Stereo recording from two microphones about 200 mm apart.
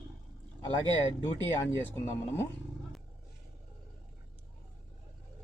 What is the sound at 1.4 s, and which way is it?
Speech, 15° left (ahead or behind).